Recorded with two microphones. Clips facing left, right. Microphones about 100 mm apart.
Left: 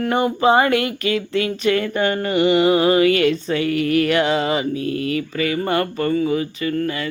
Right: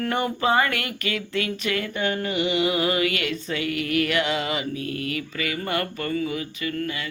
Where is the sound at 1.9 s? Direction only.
50° left (ahead or behind).